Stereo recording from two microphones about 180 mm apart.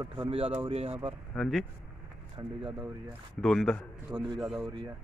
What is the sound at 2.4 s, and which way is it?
Speech, 30° right (ahead or behind).